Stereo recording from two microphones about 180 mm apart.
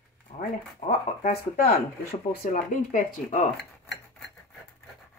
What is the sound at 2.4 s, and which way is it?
Speech, 45° left (ahead or behind).